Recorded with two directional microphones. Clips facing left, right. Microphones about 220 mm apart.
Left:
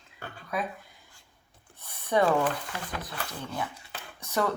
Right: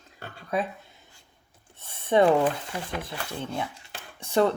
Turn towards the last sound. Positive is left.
turn(degrees=-30)  # may be behind; listen again after turning